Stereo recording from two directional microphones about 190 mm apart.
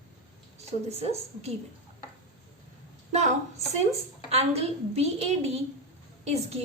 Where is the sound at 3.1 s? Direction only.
40° right (ahead or behind).